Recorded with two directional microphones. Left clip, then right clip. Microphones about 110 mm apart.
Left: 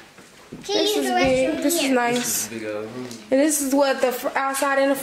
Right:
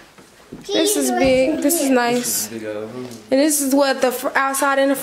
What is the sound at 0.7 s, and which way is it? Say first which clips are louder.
A child's voice: right 2 dB; 30° right (ahead or behind).